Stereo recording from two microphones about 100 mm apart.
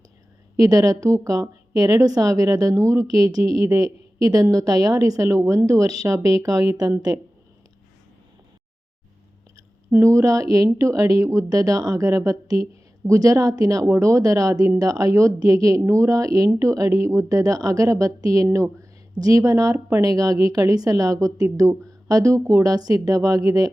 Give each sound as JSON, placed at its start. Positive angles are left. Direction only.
{"t": 0.5, "sound": "a woman's voice", "side_deg": -35}
{"t": 9.9, "sound": "a woman's voice", "side_deg": -30}